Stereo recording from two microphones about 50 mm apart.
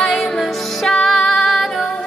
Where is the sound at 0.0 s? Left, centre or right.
Centre.